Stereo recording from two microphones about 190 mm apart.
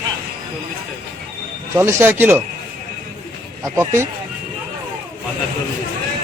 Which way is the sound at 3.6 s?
15° right (ahead or behind).